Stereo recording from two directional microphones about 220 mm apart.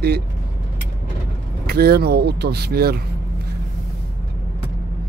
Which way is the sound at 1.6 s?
45° right (ahead or behind).